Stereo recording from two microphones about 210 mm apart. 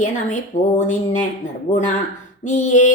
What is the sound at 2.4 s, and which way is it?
Speech, 35° left (ahead or behind).